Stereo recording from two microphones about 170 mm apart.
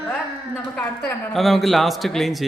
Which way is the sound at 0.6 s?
10° left (ahead or behind).